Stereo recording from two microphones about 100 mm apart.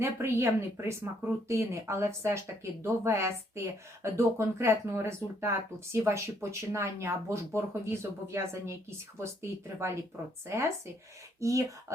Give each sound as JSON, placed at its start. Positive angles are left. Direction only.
{"t": 0.0, "sound": "speech", "side_deg": -25}